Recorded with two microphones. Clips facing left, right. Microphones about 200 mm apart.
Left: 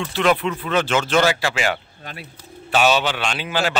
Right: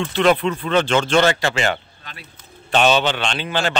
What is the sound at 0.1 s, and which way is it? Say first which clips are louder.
A man's voice: right 2 dB; 5° left (ahead or behind).